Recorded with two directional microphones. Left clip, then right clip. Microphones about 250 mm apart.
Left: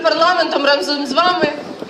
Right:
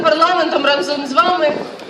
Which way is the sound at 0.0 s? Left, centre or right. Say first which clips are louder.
Right 1 dB; centre.